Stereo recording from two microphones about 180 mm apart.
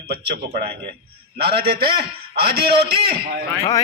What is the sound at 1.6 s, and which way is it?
Speech, 60° right (ahead or behind).